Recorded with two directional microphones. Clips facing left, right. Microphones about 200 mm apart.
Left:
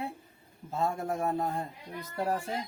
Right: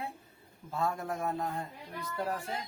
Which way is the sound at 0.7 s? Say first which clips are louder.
Left 3 dB; 25° left (ahead or behind).